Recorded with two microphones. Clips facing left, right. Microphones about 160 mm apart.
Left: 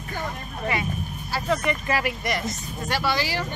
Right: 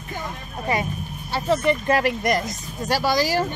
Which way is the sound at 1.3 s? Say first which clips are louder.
Right 5 dB; 30° right (ahead or behind).